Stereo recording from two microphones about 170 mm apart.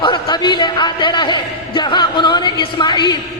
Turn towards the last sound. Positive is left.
turn(degrees=25)  # may be behind; listen again after turning